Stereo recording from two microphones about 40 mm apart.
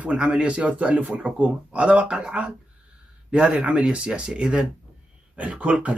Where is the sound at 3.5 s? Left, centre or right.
Right.